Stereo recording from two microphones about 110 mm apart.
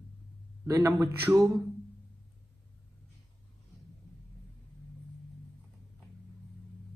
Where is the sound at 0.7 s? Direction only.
25° right (ahead or behind).